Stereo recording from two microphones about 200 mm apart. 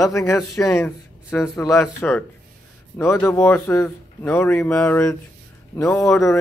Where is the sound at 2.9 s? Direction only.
10° left (ahead or behind).